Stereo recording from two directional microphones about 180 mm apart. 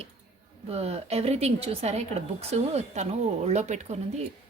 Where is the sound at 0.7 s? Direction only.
35° right (ahead or behind).